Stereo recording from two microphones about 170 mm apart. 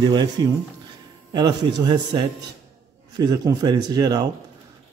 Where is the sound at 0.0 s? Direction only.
25° right (ahead or behind).